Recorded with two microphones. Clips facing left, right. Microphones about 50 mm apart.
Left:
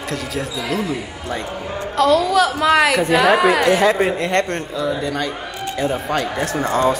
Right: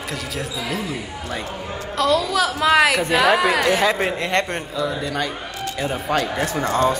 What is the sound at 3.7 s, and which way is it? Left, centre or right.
Speech, left.